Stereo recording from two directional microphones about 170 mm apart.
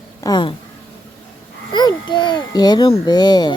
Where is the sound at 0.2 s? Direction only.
25° left (ahead or behind).